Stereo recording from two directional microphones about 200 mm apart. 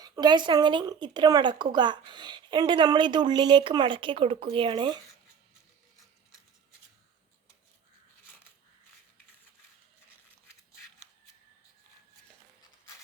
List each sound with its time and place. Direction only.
0.0 s a woman's voice: 20° right (ahead or behind)